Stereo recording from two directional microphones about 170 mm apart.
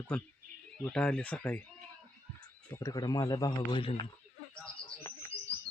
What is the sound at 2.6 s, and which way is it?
A man's voice, 20° left (ahead or behind).